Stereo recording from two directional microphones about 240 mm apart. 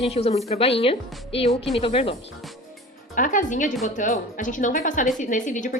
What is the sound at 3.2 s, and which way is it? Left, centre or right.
A woman's voice, left.